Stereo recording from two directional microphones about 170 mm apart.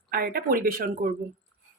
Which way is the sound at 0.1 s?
60° right (ahead or behind).